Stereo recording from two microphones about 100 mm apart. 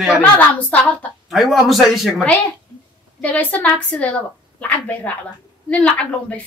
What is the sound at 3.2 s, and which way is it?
A woman's voice, 15° left (ahead or behind).